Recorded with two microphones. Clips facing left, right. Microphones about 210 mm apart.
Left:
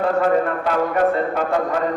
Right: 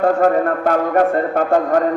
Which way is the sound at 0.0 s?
50° right (ahead or behind).